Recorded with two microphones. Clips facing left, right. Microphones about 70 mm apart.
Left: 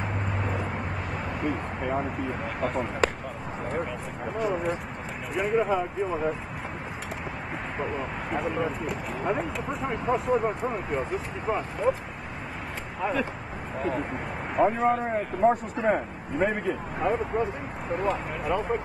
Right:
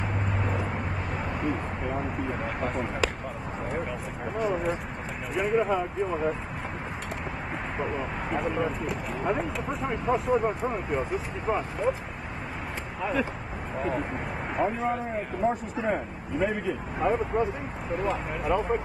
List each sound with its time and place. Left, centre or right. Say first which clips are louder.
0.4 s vehicle: even; centre
2.0 s speech: left 1 dB; centre
4.4 s speech: even; centre
7.7 s speech: even; centre
13.0 s speech: left 1 dB; centre
15.4 s a man's voice: left 5 dB; left
17.0 s speech: right 1 dB; centre